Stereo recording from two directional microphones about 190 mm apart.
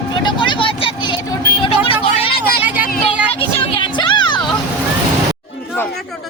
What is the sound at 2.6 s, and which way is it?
Music, 10° right (ahead or behind).